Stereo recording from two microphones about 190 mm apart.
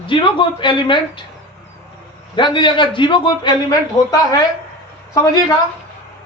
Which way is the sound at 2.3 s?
25° left (ahead or behind).